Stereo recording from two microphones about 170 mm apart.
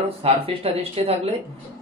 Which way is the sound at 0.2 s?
35° right (ahead or behind).